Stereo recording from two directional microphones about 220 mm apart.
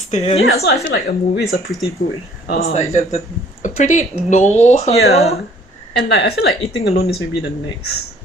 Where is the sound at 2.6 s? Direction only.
30° left (ahead or behind).